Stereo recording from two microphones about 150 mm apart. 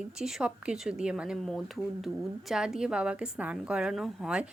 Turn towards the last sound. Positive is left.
turn(degrees=-5)  # may be behind; listen again after turning